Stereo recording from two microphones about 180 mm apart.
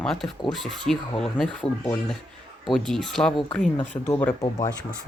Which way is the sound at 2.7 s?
Centre (ahead or behind).